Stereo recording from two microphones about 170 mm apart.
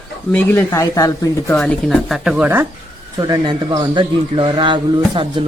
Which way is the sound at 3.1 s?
20° right (ahead or behind).